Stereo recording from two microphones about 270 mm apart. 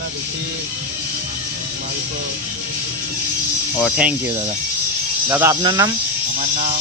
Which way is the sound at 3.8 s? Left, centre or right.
Centre.